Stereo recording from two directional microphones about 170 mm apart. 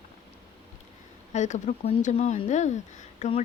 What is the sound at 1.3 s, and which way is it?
Speech, 45° left (ahead or behind).